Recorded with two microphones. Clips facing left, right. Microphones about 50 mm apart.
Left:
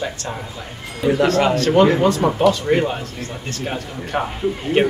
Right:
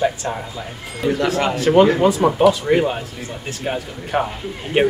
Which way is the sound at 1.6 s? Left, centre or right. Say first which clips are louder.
Right 4 dB; centre.